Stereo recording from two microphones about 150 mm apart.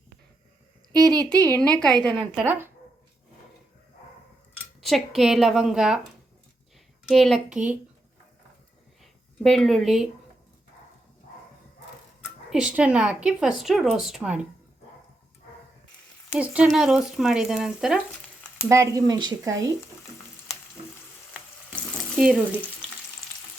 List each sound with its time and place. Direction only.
1.2 s a woman's voice: 10° left (ahead or behind)
2.3 s speech: 10° right (ahead or behind)
4.8 s speech: centre (ahead or behind)
7.1 s speech: centre (ahead or behind)
9.4 s speech: centre (ahead or behind)
12.5 s speech: 5° right (ahead or behind)
16.3 s speech: 5° right (ahead or behind)
18.7 s speech: 20° right (ahead or behind)
22.1 s speech: centre (ahead or behind)